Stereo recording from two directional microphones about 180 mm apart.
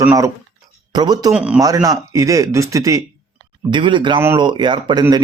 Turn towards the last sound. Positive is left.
turn(degrees=-25)  # may be behind; listen again after turning